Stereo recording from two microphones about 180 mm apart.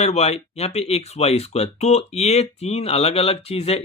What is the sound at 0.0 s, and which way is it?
Speech, 35° left (ahead or behind).